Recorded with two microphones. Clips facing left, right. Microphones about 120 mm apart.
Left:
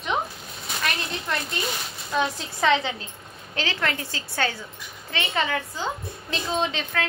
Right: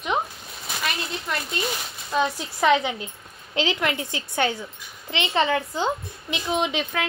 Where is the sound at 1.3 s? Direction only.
10° right (ahead or behind).